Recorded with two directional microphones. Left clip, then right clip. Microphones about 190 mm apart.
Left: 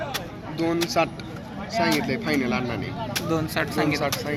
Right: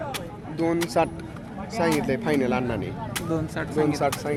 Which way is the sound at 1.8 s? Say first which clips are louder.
Even; 65° right (ahead or behind).